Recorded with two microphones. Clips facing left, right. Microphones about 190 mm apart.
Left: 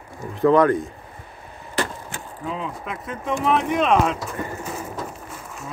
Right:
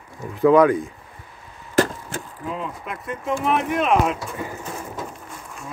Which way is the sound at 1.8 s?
40° right (ahead or behind).